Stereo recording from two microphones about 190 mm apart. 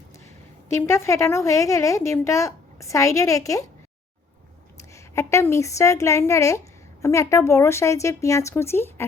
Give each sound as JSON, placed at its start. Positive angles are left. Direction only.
{"t": 0.7, "sound": "a woman's voice", "side_deg": 15}
{"t": 4.8, "sound": "a woman's voice", "side_deg": 15}